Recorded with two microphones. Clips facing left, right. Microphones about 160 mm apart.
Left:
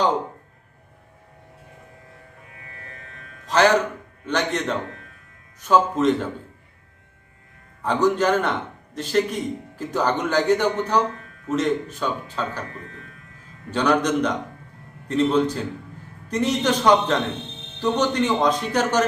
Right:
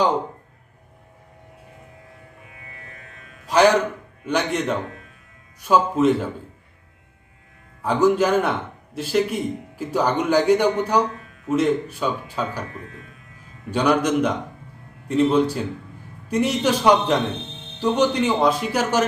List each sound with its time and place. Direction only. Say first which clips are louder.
3.4 s music: right 2 dB; 10° right (ahead or behind)
4.3 s speech: right 2 dB; 10° right (ahead or behind)
7.8 s speech: right 2 dB; 10° right (ahead or behind)
13.7 s speech: right 1 dB; 10° right (ahead or behind)